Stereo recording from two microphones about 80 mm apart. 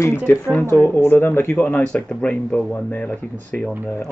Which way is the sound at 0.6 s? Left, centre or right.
Left.